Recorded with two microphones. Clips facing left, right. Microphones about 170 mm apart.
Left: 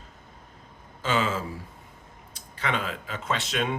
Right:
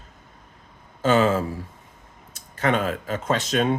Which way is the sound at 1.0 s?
45° right (ahead or behind).